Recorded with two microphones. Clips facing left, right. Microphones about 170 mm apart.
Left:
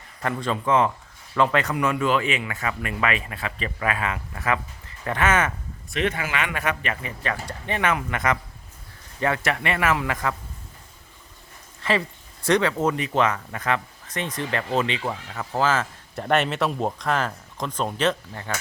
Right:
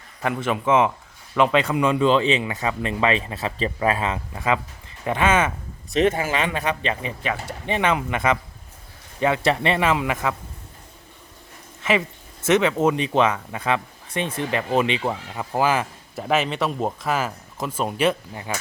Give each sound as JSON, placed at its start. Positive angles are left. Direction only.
{"t": 0.2, "sound": "speech", "side_deg": -15}
{"t": 5.9, "sound": "speech", "side_deg": -35}
{"t": 9.4, "sound": "speech", "side_deg": -25}
{"t": 11.8, "sound": "speech", "side_deg": -20}
{"t": 16.1, "sound": "speech", "side_deg": 0}